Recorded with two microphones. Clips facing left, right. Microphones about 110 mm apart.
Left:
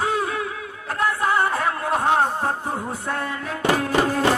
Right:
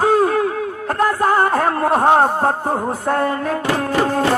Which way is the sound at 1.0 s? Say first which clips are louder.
Right 5 dB; 45° right (ahead or behind).